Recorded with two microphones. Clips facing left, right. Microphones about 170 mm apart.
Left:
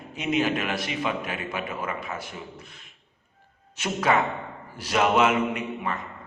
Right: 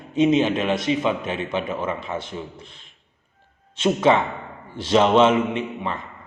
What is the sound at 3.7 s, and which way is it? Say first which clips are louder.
A man's voice: right 6 dB; 25° right (ahead or behind).